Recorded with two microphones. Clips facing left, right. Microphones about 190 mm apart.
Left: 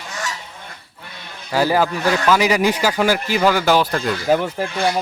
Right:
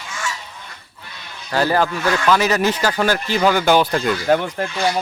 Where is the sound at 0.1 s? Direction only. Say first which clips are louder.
Even; 40° left (ahead or behind).